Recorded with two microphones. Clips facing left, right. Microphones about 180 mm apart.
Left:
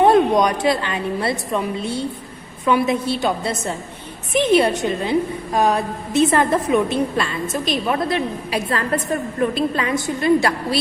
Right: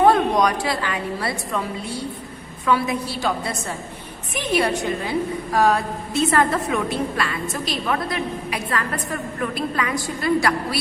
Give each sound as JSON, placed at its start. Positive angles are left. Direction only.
{"t": 0.0, "sound": "a woman's voice", "side_deg": 20}